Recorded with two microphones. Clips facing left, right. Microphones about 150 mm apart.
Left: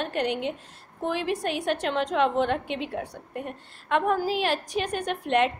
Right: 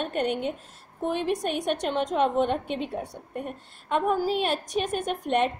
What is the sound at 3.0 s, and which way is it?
Speech, centre (ahead or behind).